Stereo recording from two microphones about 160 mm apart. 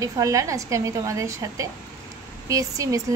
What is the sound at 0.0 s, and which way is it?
A woman's voice, 20° right (ahead or behind).